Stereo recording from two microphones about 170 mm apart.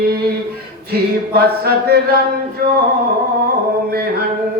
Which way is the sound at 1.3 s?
65° right (ahead or behind).